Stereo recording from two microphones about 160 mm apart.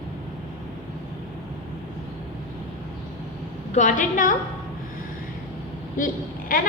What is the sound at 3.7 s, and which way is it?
Speech, 55° left (ahead or behind).